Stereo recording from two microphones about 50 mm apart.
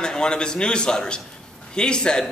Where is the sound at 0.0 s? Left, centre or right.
Centre.